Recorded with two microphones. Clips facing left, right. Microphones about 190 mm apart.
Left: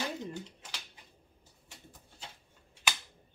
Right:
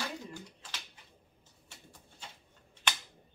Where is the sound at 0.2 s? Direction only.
20° left (ahead or behind).